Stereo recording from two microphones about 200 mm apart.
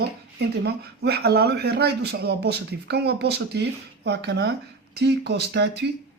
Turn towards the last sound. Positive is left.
turn(degrees=-55)  # may be behind; listen again after turning